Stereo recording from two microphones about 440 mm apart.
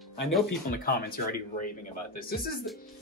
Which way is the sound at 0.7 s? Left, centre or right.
Left.